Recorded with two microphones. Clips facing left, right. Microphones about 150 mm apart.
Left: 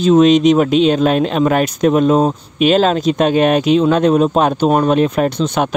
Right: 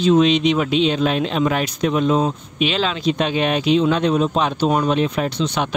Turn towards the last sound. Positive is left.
turn(degrees=50)  # may be behind; listen again after turning